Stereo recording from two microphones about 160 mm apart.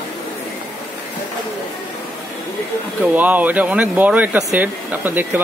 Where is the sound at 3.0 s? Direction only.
10° right (ahead or behind).